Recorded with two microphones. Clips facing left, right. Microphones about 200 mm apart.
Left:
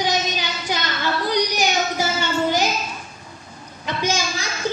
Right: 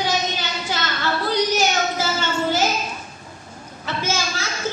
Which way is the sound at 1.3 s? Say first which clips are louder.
Right 2 dB; 15° left (ahead or behind).